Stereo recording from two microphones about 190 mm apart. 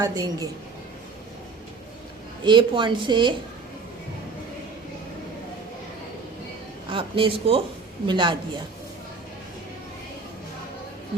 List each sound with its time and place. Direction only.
0.0 s speech: 20° right (ahead or behind)
2.4 s speech: 25° right (ahead or behind)
6.9 s speech: 25° right (ahead or behind)